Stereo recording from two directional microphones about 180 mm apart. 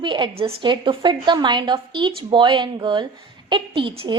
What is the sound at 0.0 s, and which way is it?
A woman's voice, 25° right (ahead or behind).